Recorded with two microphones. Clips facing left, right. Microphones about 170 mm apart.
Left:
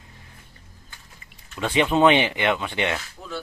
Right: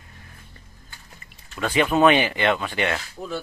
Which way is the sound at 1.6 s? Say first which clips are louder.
Even; 20° left (ahead or behind).